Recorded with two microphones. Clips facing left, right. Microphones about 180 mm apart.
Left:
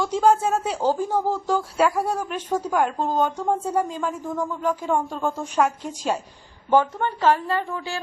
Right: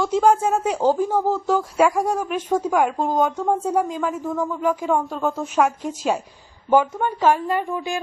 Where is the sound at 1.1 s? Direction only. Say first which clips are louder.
Right 2 dB; 10° left (ahead or behind).